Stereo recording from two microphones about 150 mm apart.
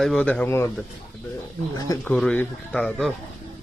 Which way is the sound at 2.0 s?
10° left (ahead or behind).